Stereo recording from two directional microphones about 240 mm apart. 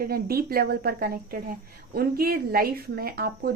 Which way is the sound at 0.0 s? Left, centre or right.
Right.